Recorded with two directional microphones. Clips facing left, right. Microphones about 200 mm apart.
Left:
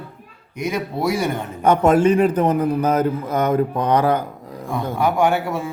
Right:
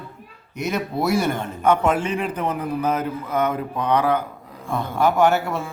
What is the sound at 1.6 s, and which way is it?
A man's voice, 40° left (ahead or behind).